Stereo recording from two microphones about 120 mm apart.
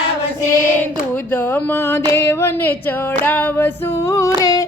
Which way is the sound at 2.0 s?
20° left (ahead or behind).